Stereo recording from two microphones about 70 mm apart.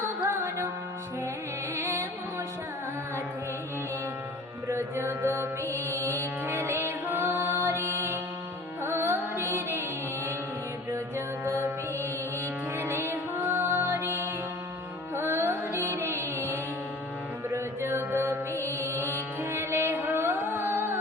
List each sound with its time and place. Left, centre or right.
1.7 s music: right
4.7 s music: right
11.4 s music: right
12.7 s music: right